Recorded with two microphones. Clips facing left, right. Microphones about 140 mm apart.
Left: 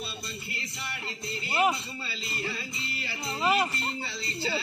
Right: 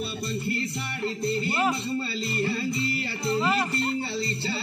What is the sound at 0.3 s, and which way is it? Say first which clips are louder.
Music: right 11 dB; 55° right (ahead or behind).